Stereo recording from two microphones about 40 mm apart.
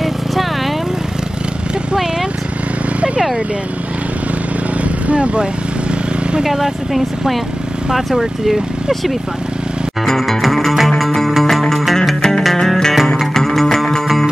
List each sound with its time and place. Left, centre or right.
5.0 s speech: right
6.4 s speech: centre
10.0 s music: centre